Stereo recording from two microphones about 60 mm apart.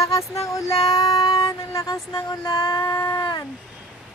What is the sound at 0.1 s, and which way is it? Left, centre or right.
Child singing, left.